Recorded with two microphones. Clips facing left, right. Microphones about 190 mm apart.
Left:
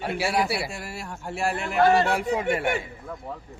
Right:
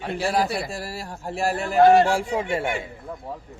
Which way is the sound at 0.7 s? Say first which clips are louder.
Right 3 dB; 35° right (ahead or behind).